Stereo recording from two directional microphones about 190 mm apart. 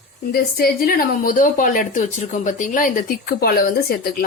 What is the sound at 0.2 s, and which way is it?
A woman's voice, 55° left (ahead or behind).